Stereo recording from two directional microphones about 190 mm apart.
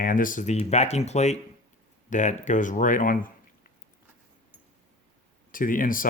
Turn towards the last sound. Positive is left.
turn(degrees=45)  # may be behind; listen again after turning